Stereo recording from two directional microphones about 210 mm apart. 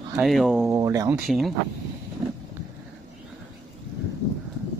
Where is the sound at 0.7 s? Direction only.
15° right (ahead or behind).